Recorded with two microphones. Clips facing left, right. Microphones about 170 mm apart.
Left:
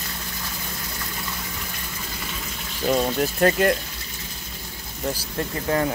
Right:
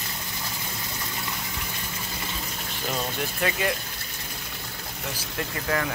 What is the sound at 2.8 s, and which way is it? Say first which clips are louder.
Speech: left 9 dB; 45° left (ahead or behind).